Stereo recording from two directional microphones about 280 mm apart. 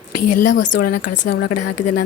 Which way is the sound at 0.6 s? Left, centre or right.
Left.